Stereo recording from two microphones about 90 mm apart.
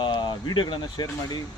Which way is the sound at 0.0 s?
60° left (ahead or behind).